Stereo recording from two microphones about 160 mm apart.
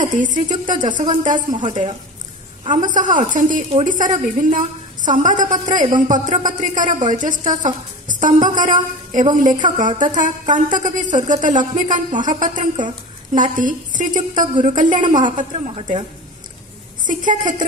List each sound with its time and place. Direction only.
0.0 s a woman's voice: 55° right (ahead or behind)
2.6 s a man's voice: 30° right (ahead or behind)
2.9 s a woman's voice: 55° right (ahead or behind)
15.5 s a woman's voice: 40° right (ahead or behind)
17.0 s a woman's voice: 55° right (ahead or behind)